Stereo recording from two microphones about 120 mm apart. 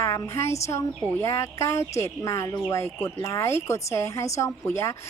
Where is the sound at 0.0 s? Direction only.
25° left (ahead or behind).